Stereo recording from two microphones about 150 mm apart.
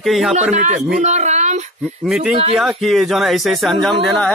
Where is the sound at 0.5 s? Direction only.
55° right (ahead or behind).